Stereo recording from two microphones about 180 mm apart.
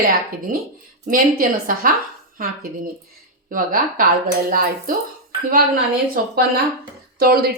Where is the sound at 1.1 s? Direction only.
50° right (ahead or behind).